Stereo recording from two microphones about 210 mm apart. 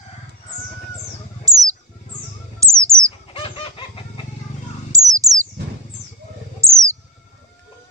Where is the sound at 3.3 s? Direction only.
25° left (ahead or behind).